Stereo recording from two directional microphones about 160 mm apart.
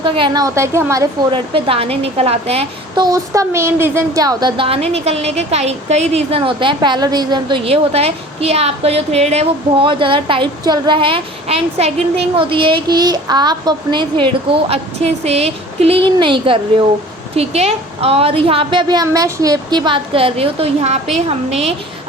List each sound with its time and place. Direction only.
0.0 s a woman's voice: 30° right (ahead or behind)
0.4 s a woman's voice: 20° right (ahead or behind)
1.3 s a woman's voice: 35° right (ahead or behind)
3.0 s a woman's voice: 20° right (ahead or behind)
14.7 s a woman's voice: 40° right (ahead or behind)